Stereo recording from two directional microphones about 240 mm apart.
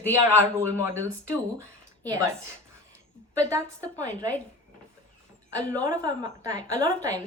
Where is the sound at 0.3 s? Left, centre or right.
Centre.